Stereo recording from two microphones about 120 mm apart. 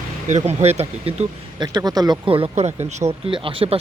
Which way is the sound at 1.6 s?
35° right (ahead or behind).